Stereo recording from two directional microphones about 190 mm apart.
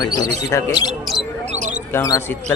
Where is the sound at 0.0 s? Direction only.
20° left (ahead or behind).